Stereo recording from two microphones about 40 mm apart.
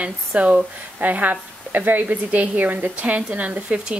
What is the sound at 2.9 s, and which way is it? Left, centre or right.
Speech, right.